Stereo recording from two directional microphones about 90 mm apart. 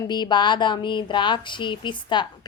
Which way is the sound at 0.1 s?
55° left (ahead or behind).